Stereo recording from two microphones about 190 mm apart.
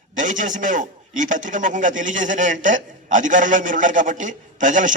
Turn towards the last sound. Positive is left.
turn(degrees=-40)  # may be behind; listen again after turning